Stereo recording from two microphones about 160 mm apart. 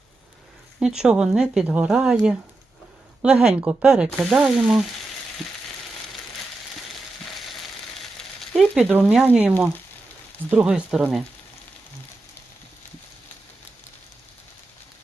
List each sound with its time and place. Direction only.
0.8 s speech: 5° right (ahead or behind)
3.2 s speech: 5° right (ahead or behind)
8.4 s speech: centre (ahead or behind)